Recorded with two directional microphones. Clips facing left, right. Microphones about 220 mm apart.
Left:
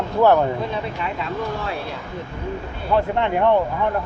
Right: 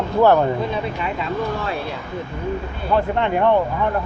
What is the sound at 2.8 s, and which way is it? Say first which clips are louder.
Speech: even; 10° left (ahead or behind).